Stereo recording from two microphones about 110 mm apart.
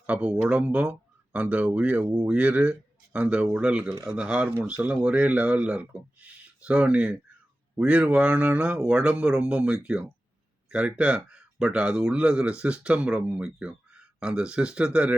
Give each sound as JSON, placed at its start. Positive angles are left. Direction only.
{"t": 0.0, "sound": "speech", "side_deg": -10}